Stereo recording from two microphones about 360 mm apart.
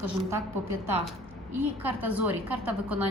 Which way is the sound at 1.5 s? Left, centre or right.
Right.